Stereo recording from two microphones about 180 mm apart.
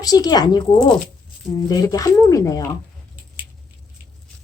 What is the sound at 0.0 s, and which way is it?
Speech, 20° left (ahead or behind).